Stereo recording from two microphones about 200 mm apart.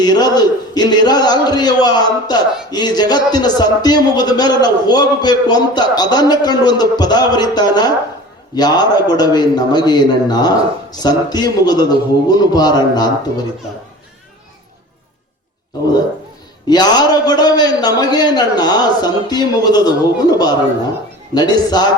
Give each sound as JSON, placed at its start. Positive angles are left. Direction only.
{"t": 0.0, "sound": "a man's voice", "side_deg": 20}
{"t": 16.6, "sound": "a man's voice", "side_deg": 20}
{"t": 21.3, "sound": "a man's voice", "side_deg": 20}